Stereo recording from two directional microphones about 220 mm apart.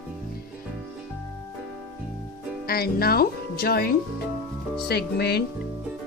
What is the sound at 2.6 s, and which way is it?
Speech, 45° left (ahead or behind).